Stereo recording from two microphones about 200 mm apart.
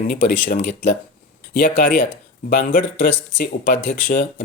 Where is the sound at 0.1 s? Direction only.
45° left (ahead or behind).